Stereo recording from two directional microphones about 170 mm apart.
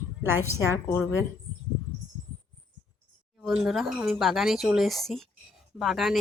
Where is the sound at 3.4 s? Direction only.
5° right (ahead or behind).